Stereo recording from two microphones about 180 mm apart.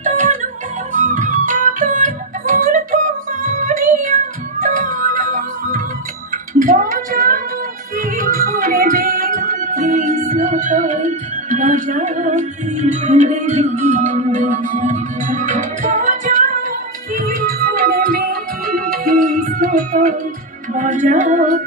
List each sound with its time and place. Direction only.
0.0 s music: 45° right (ahead or behind)